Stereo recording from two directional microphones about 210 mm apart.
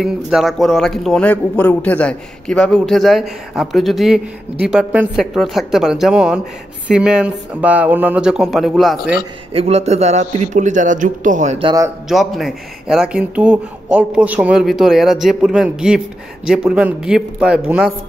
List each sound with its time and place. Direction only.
0.0 s a man's voice: centre (ahead or behind)
9.5 s a man's voice: 30° right (ahead or behind)
12.1 s a man's voice: centre (ahead or behind)